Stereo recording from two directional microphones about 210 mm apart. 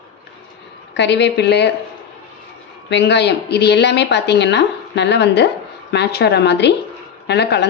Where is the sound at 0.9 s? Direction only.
55° left (ahead or behind).